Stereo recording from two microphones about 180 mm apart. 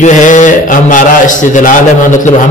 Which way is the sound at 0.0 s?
45° left (ahead or behind).